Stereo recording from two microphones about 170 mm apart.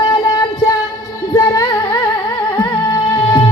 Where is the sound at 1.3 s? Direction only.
15° left (ahead or behind).